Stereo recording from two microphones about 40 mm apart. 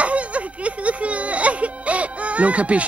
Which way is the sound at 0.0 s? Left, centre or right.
Right.